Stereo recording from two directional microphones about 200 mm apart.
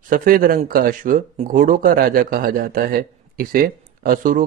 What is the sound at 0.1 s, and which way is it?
Speech, 45° right (ahead or behind).